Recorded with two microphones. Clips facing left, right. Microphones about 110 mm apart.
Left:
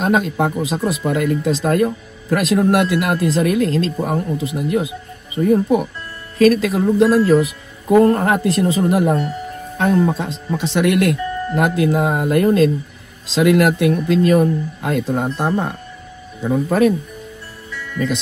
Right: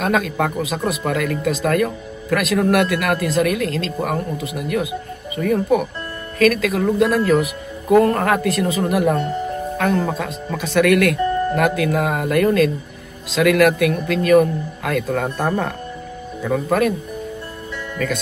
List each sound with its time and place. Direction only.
0.0 s speech: 30° left (ahead or behind)
15.2 s speech: 15° left (ahead or behind)
17.9 s speech: 20° left (ahead or behind)